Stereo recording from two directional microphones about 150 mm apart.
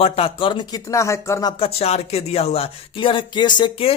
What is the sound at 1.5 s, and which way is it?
Speech, 40° left (ahead or behind).